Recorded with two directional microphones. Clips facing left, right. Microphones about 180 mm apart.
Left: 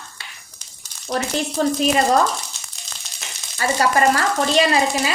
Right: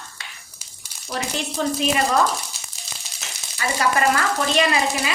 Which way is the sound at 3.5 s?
35° left (ahead or behind).